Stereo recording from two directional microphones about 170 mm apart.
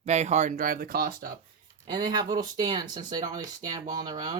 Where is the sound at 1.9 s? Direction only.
25° right (ahead or behind).